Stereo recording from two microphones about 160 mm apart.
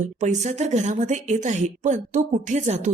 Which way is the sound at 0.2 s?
50° right (ahead or behind).